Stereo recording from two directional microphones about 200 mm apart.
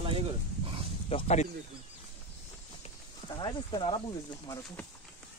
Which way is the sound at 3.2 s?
20° left (ahead or behind).